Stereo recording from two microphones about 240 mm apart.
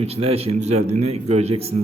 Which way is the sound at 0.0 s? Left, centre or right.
Right.